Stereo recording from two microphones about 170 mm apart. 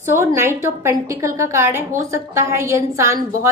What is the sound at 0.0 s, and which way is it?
A woman's voice, 15° right (ahead or behind).